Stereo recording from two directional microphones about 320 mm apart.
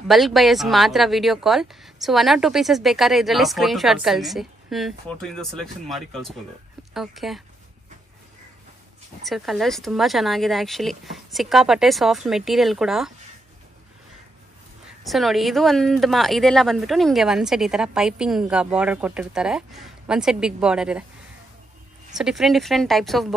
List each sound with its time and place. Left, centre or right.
0.1 s speech: centre
9.3 s speech: centre
14.9 s speech: centre
22.1 s speech: centre